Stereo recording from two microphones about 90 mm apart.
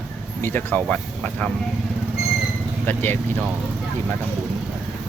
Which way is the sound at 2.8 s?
25° left (ahead or behind).